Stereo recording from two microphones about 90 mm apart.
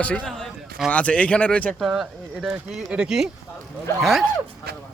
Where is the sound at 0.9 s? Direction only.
15° left (ahead or behind).